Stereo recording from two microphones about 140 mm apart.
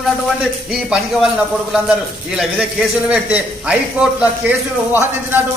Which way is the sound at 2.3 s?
5° right (ahead or behind).